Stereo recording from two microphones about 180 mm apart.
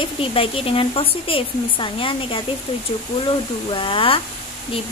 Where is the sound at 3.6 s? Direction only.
30° left (ahead or behind).